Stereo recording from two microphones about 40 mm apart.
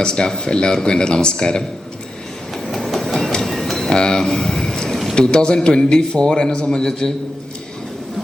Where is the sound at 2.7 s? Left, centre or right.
Centre.